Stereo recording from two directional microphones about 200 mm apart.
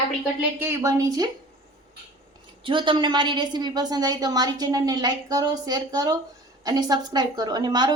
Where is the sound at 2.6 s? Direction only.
25° right (ahead or behind).